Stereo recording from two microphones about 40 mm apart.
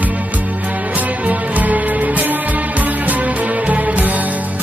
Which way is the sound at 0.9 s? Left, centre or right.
Right.